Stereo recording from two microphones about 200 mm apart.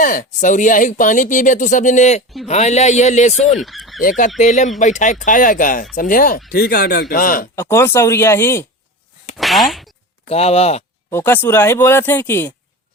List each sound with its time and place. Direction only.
0.0 s speech: 45° left (ahead or behind)
3.6 s fowl: centre (ahead or behind)
4.4 s speech: 35° left (ahead or behind)
7.5 s speech: 15° left (ahead or behind)
9.4 s speech: centre (ahead or behind)
10.2 s speech: 30° left (ahead or behind)
11.1 s speech: 10° left (ahead or behind)